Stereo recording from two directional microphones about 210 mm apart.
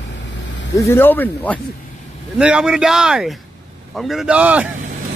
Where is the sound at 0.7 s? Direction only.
10° left (ahead or behind).